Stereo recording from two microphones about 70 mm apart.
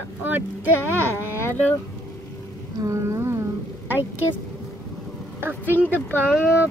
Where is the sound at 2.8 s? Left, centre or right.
Right.